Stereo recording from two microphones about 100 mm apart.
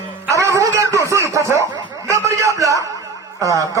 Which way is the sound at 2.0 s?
30° right (ahead or behind).